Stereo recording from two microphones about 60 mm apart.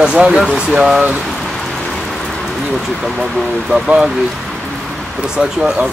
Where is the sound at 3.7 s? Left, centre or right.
Centre.